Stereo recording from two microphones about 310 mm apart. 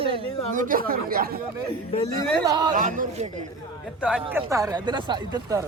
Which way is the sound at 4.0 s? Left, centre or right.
Centre.